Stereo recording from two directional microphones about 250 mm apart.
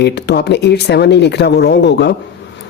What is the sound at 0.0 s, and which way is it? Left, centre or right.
A woman's voice, left.